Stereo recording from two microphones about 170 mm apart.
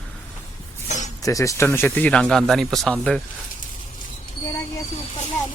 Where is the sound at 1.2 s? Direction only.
20° left (ahead or behind).